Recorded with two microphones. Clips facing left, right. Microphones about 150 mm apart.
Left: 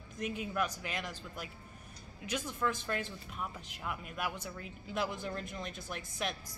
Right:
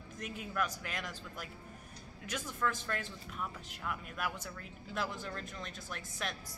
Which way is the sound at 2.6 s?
10° left (ahead or behind).